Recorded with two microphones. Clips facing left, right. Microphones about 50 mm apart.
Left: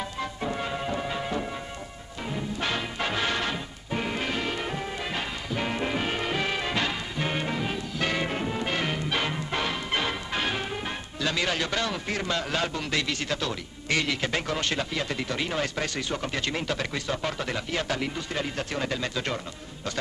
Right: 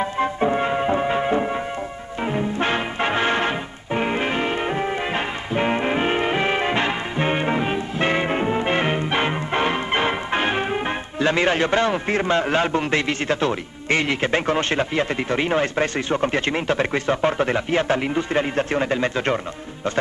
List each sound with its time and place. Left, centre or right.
0.0 s music: right